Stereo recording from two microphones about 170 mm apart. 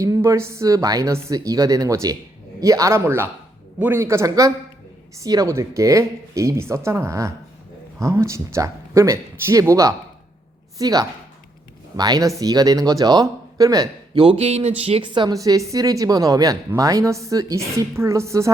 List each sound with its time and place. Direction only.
0.0 s a woman's voice: 20° right (ahead or behind)